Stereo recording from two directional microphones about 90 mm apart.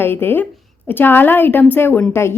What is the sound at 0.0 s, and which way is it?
A woman's voice, 25° left (ahead or behind).